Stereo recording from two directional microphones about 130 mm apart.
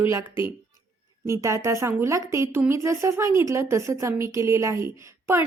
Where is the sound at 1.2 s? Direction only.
20° right (ahead or behind).